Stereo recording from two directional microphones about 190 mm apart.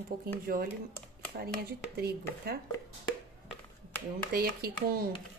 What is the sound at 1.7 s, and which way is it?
Speech, 55° right (ahead or behind).